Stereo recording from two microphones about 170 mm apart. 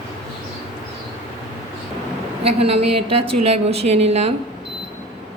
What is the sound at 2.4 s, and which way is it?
A woman's voice, 35° right (ahead or behind).